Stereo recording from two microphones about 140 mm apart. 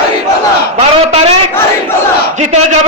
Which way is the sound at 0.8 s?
50° right (ahead or behind).